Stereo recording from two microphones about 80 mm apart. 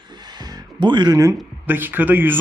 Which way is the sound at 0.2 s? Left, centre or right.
Right.